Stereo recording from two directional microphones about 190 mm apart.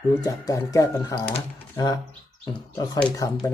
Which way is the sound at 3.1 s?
15° left (ahead or behind).